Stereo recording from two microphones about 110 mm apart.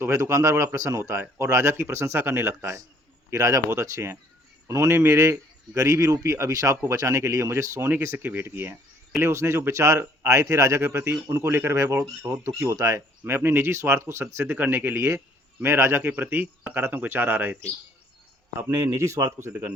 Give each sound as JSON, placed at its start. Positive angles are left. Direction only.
{"t": 0.0, "sound": "a man's voice", "side_deg": -25}
{"t": 18.7, "sound": "a man's voice", "side_deg": -25}